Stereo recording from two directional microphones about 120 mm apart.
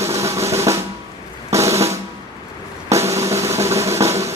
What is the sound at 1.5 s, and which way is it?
Drum, 25° right (ahead or behind).